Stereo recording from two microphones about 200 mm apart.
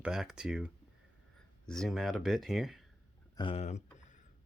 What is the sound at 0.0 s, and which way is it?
Speech, centre (ahead or behind).